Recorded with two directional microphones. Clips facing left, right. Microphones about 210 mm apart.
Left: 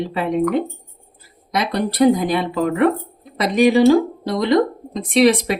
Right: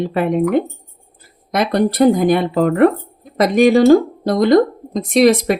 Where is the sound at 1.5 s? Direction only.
50° right (ahead or behind).